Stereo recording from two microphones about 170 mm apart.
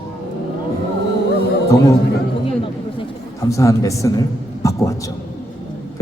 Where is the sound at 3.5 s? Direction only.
20° left (ahead or behind).